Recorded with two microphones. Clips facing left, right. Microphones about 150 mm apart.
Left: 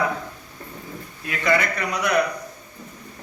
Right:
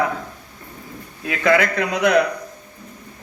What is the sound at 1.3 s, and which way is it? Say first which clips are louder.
Speech: right 5 dB; 65° right (ahead or behind).